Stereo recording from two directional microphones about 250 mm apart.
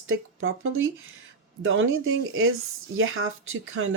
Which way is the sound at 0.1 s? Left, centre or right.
Right.